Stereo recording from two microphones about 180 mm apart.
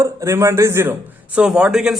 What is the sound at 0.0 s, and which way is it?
A man's voice, 15° right (ahead or behind).